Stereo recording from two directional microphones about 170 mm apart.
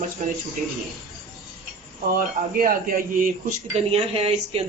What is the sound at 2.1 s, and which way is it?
Speech, 55° right (ahead or behind).